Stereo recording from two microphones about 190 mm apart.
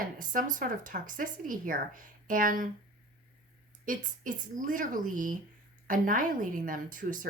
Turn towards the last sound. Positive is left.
turn(degrees=-45)  # may be behind; listen again after turning